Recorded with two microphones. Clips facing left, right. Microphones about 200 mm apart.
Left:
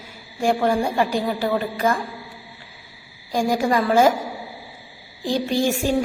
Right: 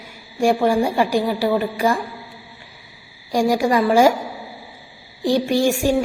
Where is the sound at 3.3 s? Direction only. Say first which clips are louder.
Right 3 dB; 15° right (ahead or behind).